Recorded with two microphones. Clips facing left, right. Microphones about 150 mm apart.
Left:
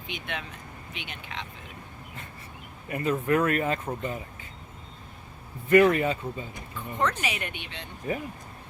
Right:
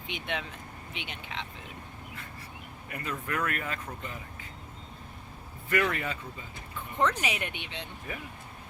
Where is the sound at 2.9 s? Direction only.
25° left (ahead or behind).